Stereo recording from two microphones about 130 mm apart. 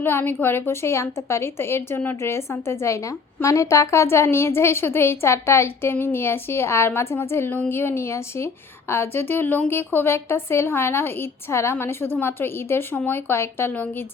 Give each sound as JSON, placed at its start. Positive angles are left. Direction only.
{"t": 0.0, "sound": "a woman's voice", "side_deg": 15}